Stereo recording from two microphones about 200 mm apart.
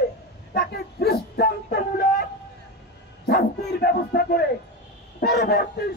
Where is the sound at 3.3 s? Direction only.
50° left (ahead or behind).